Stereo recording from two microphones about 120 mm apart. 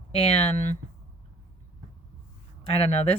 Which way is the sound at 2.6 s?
55° left (ahead or behind).